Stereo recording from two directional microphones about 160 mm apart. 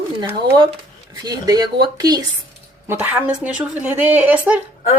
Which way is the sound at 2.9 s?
10° right (ahead or behind).